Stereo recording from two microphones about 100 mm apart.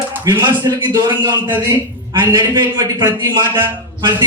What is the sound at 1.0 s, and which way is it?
Speech, 45° right (ahead or behind).